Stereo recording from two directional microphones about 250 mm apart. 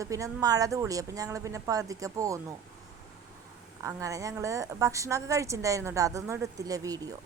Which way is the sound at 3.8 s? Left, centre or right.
Centre.